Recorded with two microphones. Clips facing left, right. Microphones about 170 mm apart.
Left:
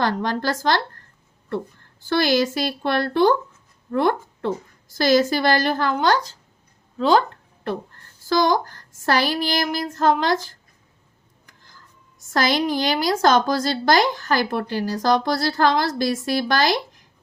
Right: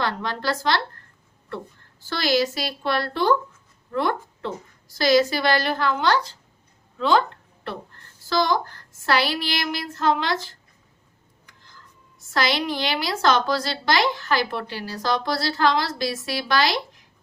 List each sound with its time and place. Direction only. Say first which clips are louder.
0.0 s a woman's voice: left 4 dB; 45° left (ahead or behind)
2.0 s a woman's voice: left 3 dB; 50° left (ahead or behind)
8.3 s a woman's voice: left 3 dB; 45° left (ahead or behind)
12.3 s a woman's voice: left 3 dB; 45° left (ahead or behind)